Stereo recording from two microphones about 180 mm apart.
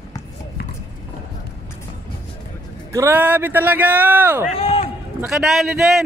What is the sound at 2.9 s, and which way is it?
A man's voice, 10° right (ahead or behind).